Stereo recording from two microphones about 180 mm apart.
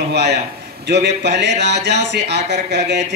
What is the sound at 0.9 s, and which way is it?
Speech, 65° right (ahead or behind).